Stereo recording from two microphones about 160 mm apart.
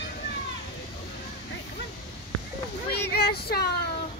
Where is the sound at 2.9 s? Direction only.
90° left.